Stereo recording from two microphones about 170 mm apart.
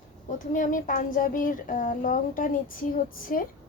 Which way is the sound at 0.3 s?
50° left (ahead or behind).